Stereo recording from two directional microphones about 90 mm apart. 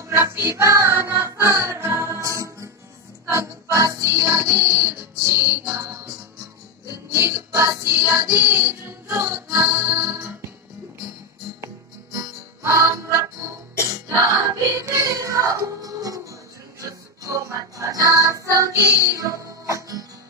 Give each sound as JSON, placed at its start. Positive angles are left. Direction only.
{"t": 0.0, "sound": "music", "side_deg": -25}
{"t": 11.6, "sound": "music", "side_deg": -35}